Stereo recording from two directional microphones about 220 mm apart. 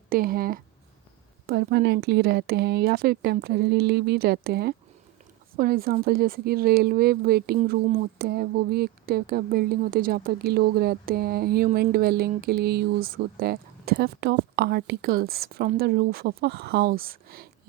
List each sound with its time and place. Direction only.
0.1 s speech: 40° right (ahead or behind)
1.5 s speech: 50° right (ahead or behind)